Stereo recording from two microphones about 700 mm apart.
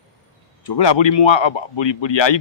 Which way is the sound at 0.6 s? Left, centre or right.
Left.